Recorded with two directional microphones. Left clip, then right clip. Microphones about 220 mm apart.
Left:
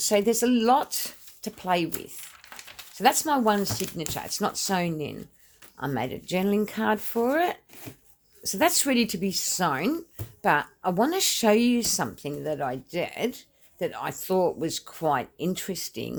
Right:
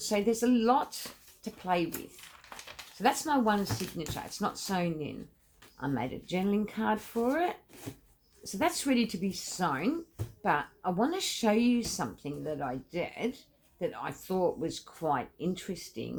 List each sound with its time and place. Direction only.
0.0 s speech: 50° left (ahead or behind)
3.0 s speech: 50° left (ahead or behind)